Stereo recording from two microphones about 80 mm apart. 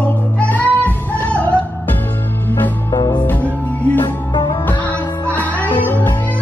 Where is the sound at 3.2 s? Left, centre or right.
Left.